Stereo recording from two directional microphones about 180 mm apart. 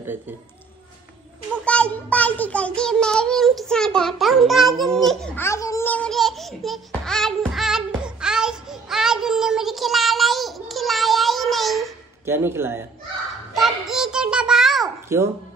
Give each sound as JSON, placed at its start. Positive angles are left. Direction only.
{"t": 0.0, "sound": "a man's voice", "side_deg": -10}
{"t": 1.6, "sound": "child singing", "side_deg": 5}
{"t": 5.4, "sound": "babbling", "side_deg": 15}
{"t": 12.3, "sound": "a man's voice", "side_deg": -15}
{"t": 13.6, "sound": "a sound", "side_deg": 0}
{"t": 15.1, "sound": "a man's voice", "side_deg": -15}